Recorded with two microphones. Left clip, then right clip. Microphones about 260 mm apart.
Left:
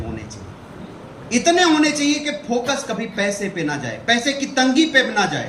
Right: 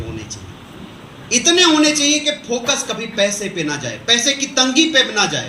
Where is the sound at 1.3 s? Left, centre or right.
Left.